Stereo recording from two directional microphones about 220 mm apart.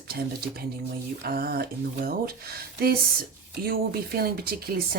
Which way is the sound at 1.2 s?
40° right (ahead or behind).